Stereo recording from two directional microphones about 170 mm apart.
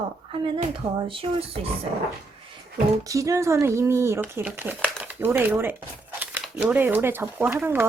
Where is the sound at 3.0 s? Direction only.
20° right (ahead or behind).